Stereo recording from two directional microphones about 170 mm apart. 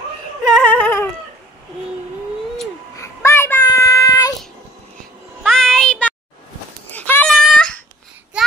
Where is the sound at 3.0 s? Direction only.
15° left (ahead or behind).